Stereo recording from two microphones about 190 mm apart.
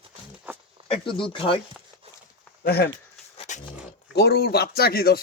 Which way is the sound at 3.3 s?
35° left (ahead or behind).